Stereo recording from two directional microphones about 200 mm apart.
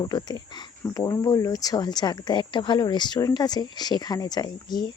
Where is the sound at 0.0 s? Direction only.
20° left (ahead or behind).